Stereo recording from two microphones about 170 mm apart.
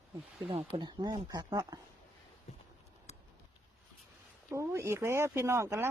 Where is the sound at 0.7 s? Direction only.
25° right (ahead or behind).